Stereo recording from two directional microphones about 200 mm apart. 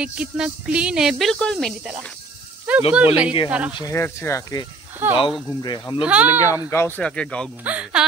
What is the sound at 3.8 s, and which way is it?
Speech, 15° left (ahead or behind).